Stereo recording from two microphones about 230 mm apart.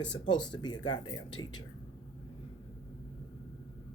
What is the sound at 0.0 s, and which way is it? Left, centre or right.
Speech, centre.